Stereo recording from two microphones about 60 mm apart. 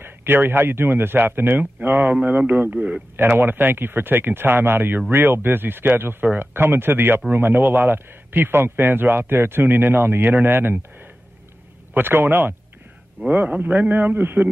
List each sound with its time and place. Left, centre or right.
0.0 s a man's voice: right
3.2 s speech: right
11.9 s speech: right
13.3 s a man's voice: right